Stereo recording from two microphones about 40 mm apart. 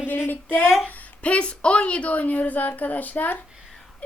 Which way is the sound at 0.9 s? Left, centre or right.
Left.